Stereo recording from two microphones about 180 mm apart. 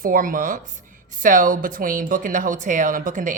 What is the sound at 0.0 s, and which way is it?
A woman's voice, 50° right (ahead or behind).